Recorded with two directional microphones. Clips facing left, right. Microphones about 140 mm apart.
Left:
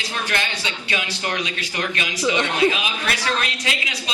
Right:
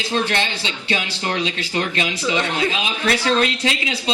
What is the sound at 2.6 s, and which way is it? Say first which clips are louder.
A man's voice: left 2 dB; 30° right (ahead or behind).